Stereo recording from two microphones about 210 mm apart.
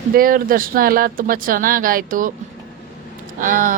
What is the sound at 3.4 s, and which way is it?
Speech, 40° right (ahead or behind).